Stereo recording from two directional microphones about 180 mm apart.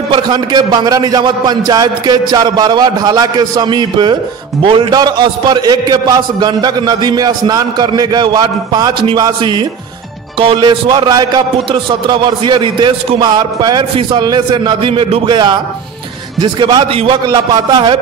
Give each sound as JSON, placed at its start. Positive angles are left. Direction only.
{"t": 0.1, "sound": "a man's voice", "side_deg": -25}